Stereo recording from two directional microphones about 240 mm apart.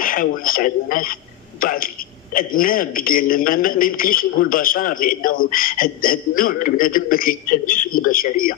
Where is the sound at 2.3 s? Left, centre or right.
Left.